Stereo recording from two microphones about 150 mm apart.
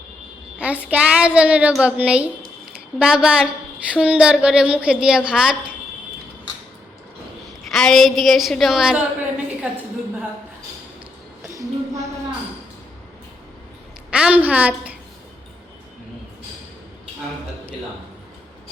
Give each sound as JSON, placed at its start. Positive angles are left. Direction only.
{"t": 0.6, "sound": "a woman's voice", "side_deg": -10}
{"t": 7.7, "sound": "a woman's voice", "side_deg": 0}
{"t": 11.4, "sound": "a sound", "side_deg": -20}
{"t": 14.1, "sound": "a woman's voice", "side_deg": -10}